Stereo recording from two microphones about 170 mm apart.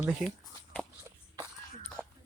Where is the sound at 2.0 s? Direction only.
5° left (ahead or behind).